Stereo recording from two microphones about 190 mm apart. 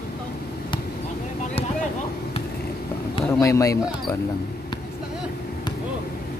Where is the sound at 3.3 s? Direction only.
15° left (ahead or behind).